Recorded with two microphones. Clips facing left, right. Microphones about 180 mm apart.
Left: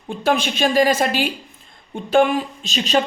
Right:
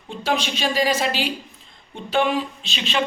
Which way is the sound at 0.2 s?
55° left (ahead or behind).